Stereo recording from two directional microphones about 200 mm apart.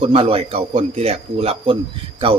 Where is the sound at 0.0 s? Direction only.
30° right (ahead or behind).